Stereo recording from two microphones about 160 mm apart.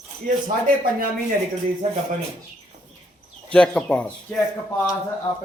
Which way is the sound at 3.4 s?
5° left (ahead or behind).